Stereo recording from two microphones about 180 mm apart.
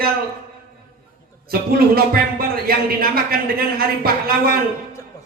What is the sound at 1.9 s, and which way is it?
A man's voice, 55° right (ahead or behind).